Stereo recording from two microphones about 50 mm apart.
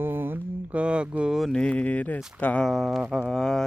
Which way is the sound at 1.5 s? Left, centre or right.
Left.